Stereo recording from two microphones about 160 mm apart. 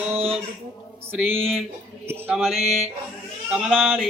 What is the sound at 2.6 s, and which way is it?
Mantra, 40° right (ahead or behind).